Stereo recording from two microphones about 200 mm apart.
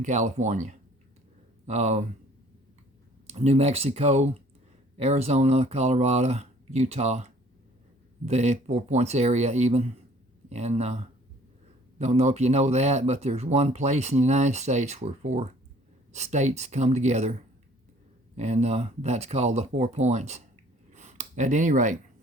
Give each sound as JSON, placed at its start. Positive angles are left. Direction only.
{"t": 0.0, "sound": "speech", "side_deg": -35}
{"t": 3.3, "sound": "speech", "side_deg": -30}
{"t": 8.3, "sound": "speech", "side_deg": -35}
{"t": 18.3, "sound": "speech", "side_deg": -35}
{"t": 20.9, "sound": "a sound", "side_deg": -35}